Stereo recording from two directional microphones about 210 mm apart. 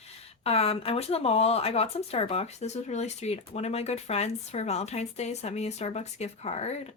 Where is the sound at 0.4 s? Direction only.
30° left (ahead or behind).